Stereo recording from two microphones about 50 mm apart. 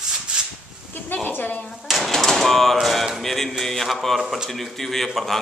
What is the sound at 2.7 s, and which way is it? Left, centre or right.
A man's voice, centre.